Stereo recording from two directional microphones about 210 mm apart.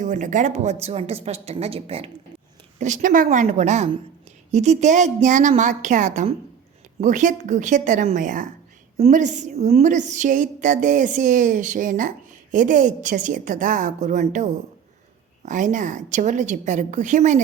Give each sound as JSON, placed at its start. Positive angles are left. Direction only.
{"t": 0.0, "sound": "a woman's voice", "side_deg": -35}